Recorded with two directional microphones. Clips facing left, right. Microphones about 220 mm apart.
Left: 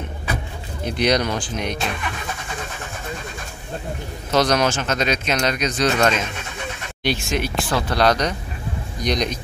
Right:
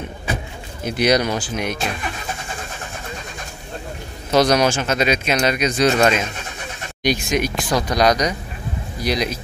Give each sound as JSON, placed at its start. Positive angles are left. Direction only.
{"t": 0.8, "sound": "speech", "side_deg": -5}
{"t": 4.3, "sound": "a man's voice", "side_deg": -10}